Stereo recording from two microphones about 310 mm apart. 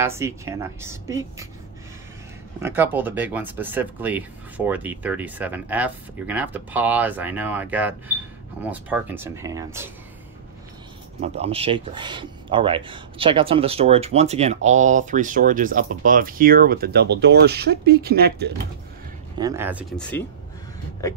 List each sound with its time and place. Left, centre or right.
0.0 s a woman's voice: centre
2.6 s a woman's voice: centre
11.1 s speech: centre
19.3 s speech: centre